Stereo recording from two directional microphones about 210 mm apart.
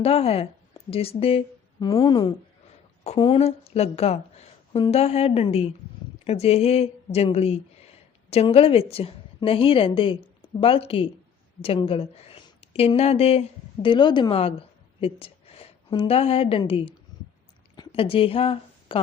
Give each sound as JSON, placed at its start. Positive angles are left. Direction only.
{"t": 0.0, "sound": "a woman's voice", "side_deg": 30}